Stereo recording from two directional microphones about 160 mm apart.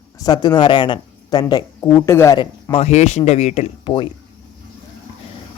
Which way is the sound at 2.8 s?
45° left (ahead or behind).